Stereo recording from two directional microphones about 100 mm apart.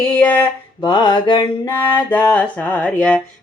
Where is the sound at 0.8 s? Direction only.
45° left (ahead or behind).